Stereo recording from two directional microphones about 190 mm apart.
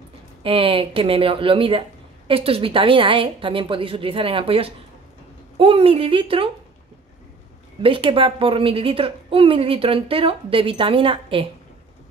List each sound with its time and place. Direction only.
0.4 s speech: 30° right (ahead or behind)
7.8 s speech: 25° right (ahead or behind)